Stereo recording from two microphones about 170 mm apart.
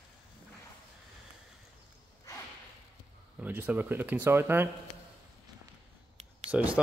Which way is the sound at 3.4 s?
10° right (ahead or behind).